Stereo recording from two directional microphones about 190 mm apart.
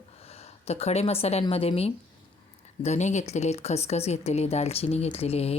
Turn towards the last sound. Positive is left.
turn(degrees=30)  # may be behind; listen again after turning